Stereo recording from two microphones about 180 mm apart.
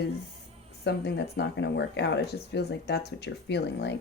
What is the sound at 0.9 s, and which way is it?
A woman's voice, 70° left (ahead or behind).